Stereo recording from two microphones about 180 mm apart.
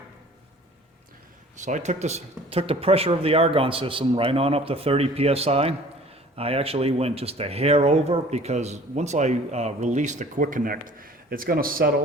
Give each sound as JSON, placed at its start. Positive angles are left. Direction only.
{"t": 1.6, "sound": "speech", "side_deg": -40}